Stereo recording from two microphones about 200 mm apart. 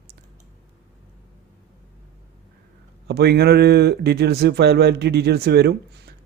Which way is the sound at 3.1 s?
55° right (ahead or behind).